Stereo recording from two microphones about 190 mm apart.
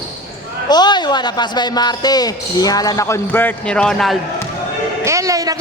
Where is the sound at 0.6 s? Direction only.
20° left (ahead or behind); by 4.1 s centre (ahead or behind).